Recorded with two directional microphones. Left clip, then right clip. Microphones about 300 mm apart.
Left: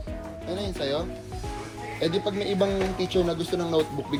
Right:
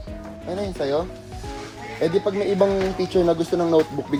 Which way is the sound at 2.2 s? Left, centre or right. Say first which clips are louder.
Right 6 dB; centre.